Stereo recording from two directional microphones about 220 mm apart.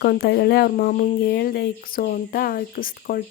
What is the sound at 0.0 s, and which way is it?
Speech, 40° left (ahead or behind).